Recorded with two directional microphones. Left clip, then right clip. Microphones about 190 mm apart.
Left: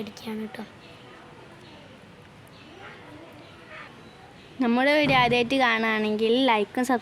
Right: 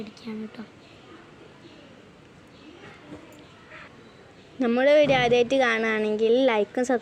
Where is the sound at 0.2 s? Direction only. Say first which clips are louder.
Left 3 dB; 55° left (ahead or behind).